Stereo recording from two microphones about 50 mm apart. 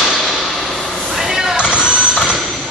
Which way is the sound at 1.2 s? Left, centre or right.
Centre.